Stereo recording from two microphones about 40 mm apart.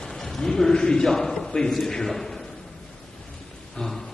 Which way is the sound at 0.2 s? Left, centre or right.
Centre.